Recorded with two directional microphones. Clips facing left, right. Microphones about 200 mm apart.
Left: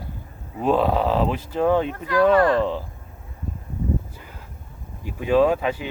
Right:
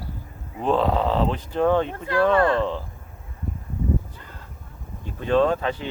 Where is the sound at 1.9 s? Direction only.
25° right (ahead or behind).